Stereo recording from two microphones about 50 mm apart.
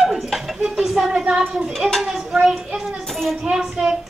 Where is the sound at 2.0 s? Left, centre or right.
Centre.